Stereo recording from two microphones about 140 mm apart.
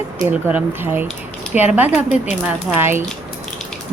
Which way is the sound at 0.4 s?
15° right (ahead or behind).